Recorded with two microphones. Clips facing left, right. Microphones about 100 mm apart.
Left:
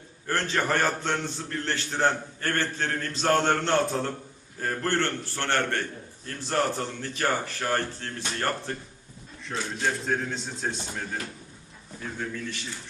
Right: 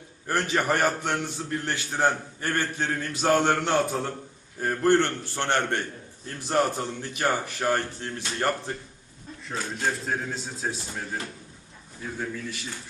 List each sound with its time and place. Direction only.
0.3 s a man's voice: 10° right (ahead or behind)
9.4 s a man's voice: centre (ahead or behind)
12.2 s a man's voice: 5° right (ahead or behind)